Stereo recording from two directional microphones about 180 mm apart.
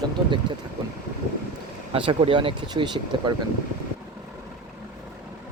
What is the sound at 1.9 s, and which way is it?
Speech, 30° right (ahead or behind).